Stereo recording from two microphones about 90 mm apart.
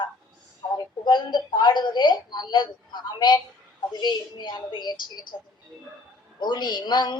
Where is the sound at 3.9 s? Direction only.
55° left (ahead or behind).